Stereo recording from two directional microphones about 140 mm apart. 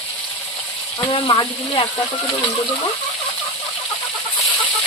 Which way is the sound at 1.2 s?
35° left (ahead or behind).